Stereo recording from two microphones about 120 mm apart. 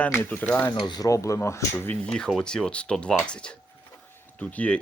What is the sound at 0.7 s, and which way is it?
Speech, 40° left (ahead or behind).